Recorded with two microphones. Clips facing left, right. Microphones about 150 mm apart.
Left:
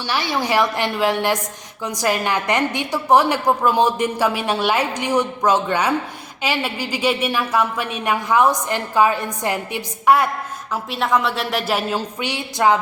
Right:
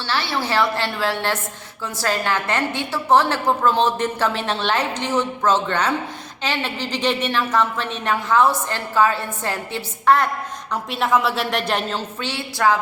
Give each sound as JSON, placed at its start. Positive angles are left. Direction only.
{"t": 0.1, "sound": "a woman's voice", "side_deg": 15}
{"t": 10.9, "sound": "a woman's voice", "side_deg": 0}